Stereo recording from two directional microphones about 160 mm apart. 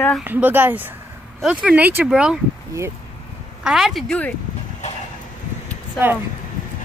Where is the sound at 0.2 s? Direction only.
10° right (ahead or behind).